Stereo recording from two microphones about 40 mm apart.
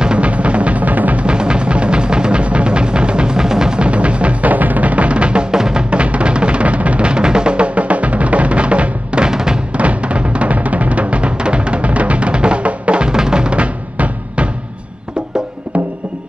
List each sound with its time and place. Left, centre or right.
0.0 s music: right
1.2 s music: right
5.9 s music: right
9.3 s music: centre
9.8 s music: right